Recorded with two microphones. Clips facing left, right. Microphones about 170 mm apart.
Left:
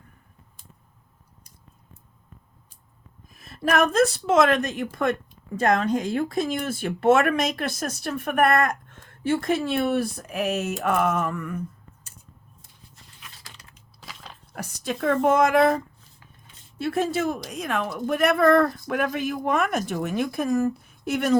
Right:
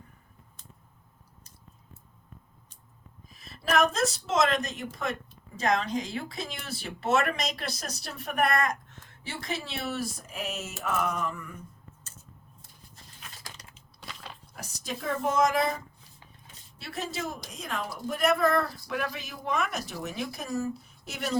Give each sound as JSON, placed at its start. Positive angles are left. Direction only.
{"t": 3.2, "sound": "a woman's voice", "side_deg": 50}
{"t": 14.0, "sound": "biting", "side_deg": 0}
{"t": 14.5, "sound": "speech", "side_deg": 60}